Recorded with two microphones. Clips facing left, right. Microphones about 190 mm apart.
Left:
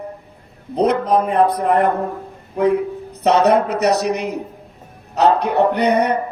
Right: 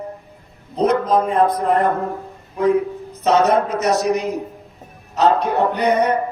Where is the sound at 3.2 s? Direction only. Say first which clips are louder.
Left 1 dB; 65° left (ahead or behind).